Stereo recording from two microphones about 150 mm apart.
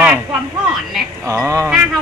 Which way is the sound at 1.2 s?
20° right (ahead or behind).